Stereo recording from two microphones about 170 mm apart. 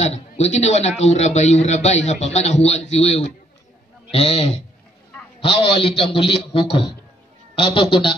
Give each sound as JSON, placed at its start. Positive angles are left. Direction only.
{"t": 0.0, "sound": "a man's voice", "side_deg": 40}